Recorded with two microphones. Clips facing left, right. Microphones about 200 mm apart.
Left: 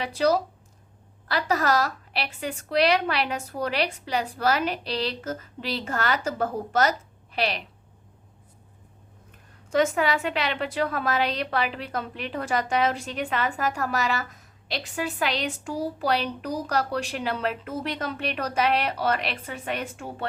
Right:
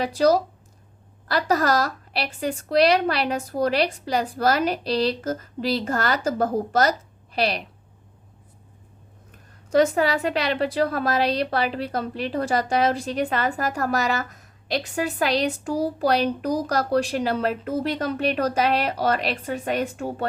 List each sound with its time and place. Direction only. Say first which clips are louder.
0.2 s a woman's voice: right 3 dB; 40° right (ahead or behind)
9.6 s a woman's voice: right 4 dB; 35° right (ahead or behind)